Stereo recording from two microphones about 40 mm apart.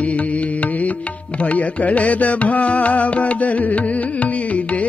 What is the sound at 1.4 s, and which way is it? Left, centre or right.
Music, left.